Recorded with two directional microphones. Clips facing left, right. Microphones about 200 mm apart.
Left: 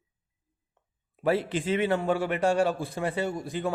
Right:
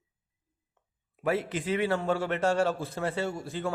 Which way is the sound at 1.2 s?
30° left (ahead or behind).